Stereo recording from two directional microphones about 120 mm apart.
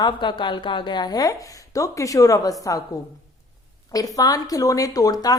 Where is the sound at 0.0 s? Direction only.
40° left (ahead or behind).